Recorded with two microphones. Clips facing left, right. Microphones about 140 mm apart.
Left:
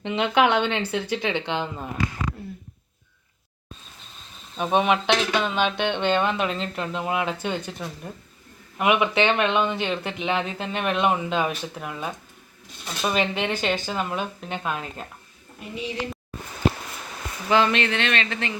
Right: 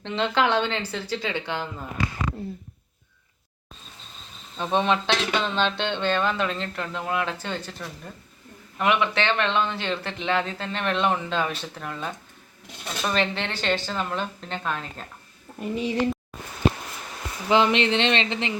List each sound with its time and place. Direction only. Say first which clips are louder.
0.0 s speech: left 3 dB; 15° left (ahead or behind)
4.5 s speech: left 2 dB; 15° left (ahead or behind)
15.6 s speech: right 5 dB; 45° right (ahead or behind)
17.5 s speech: right 1 dB; 20° right (ahead or behind)